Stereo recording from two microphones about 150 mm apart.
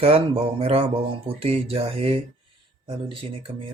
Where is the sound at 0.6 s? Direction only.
40° right (ahead or behind).